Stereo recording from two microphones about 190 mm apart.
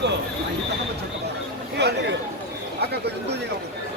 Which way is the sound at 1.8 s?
60° right (ahead or behind).